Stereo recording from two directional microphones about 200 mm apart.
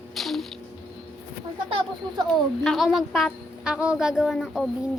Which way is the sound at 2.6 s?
Centre (ahead or behind).